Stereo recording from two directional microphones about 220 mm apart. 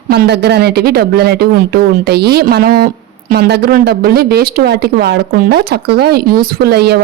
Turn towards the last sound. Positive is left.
turn(degrees=-45)  # may be behind; listen again after turning